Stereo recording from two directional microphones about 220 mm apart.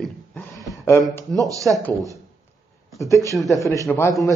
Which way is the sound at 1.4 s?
15° right (ahead or behind).